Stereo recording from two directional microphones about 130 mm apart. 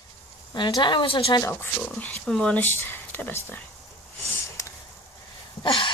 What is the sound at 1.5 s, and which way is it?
Speech, 15° left (ahead or behind).